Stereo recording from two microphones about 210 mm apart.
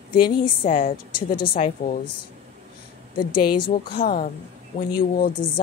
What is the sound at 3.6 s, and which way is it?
Speech, 45° left (ahead or behind).